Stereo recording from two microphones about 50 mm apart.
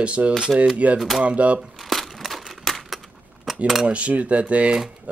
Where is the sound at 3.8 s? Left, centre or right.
Right.